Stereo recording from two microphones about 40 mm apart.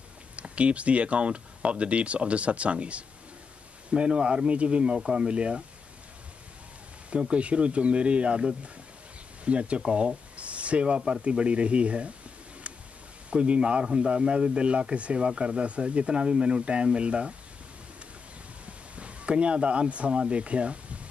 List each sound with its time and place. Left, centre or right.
0.4 s speech: right
7.1 s speech: right
13.3 s speech: right
18.7 s speech: right